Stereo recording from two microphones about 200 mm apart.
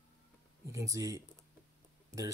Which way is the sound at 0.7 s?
15° right (ahead or behind).